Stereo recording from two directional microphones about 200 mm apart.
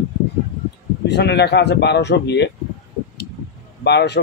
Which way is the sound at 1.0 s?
55° left (ahead or behind).